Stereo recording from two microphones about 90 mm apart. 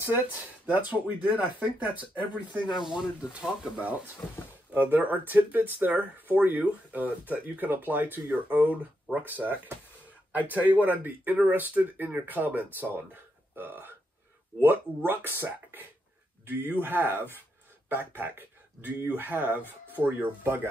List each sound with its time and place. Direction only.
0.0 s speech: 20° right (ahead or behind)